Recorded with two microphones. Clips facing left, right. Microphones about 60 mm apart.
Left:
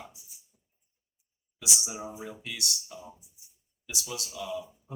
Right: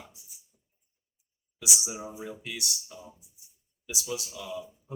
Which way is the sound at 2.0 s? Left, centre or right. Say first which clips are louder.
Even; centre.